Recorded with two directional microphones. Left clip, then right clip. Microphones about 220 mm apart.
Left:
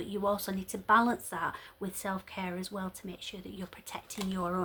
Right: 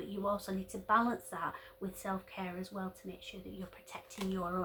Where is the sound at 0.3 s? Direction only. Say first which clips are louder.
Left 4 dB; 50° left (ahead or behind).